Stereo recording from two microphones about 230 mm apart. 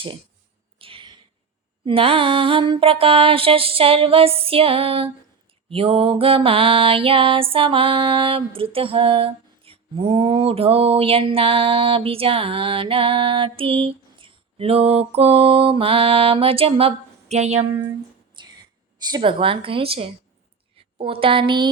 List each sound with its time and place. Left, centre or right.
0.8 s a sound: right
1.8 s mantra: right
18.4 s whispering: centre
19.1 s mantra: right